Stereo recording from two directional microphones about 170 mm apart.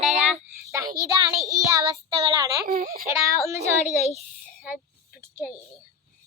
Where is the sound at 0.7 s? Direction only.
20° right (ahead or behind).